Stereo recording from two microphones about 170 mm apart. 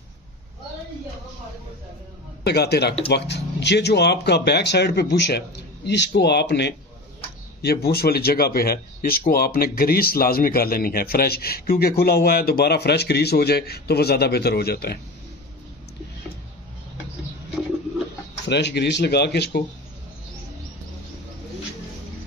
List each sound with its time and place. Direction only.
2.4 s a man's voice: 75° left (ahead or behind)
3.1 s speech: 85° left
7.6 s a man's voice: 70° left (ahead or behind)
18.5 s speech: 85° left